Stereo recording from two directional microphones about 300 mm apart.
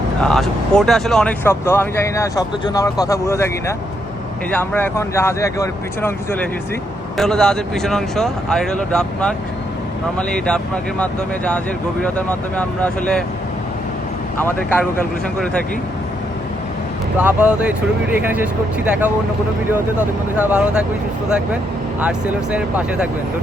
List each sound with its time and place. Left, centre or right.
0.2 s speech: centre
14.3 s speech: centre
17.2 s speech: centre
19.7 s speech: centre